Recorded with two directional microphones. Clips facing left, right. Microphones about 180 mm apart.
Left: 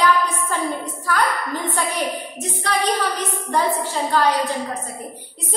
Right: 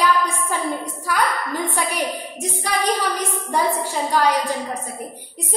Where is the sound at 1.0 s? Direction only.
10° right (ahead or behind).